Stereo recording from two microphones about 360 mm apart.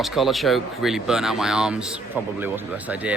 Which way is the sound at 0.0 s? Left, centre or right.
Centre.